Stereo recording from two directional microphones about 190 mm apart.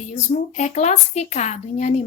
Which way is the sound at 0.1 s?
40° left (ahead or behind).